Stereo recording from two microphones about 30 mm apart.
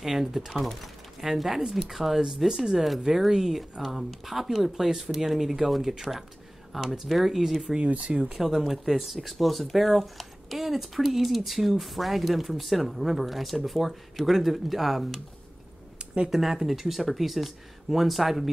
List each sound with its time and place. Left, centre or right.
0.5 s speech: centre
1.2 s speech: centre
7.7 s speech: right
8.4 s speech: centre
16.3 s speech: centre